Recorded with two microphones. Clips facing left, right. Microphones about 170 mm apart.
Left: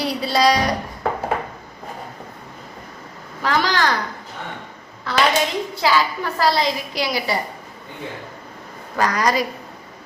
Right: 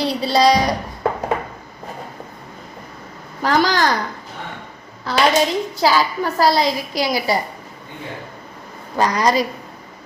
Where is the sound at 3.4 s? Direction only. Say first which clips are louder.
Right 4 dB; 40° right (ahead or behind).